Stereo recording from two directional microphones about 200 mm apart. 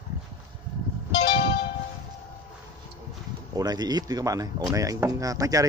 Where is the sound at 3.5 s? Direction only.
20° right (ahead or behind).